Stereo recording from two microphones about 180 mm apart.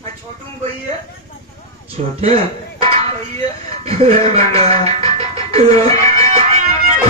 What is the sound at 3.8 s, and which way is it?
Music, 35° right (ahead or behind).